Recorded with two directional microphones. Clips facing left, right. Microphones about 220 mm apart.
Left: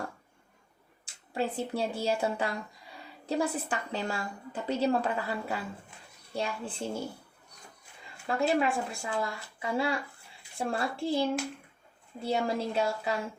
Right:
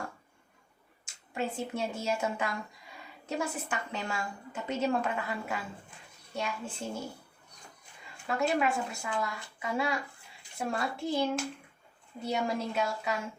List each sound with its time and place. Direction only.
1.0 s a woman's voice: 35° left (ahead or behind)
8.3 s a woman's voice: 30° left (ahead or behind)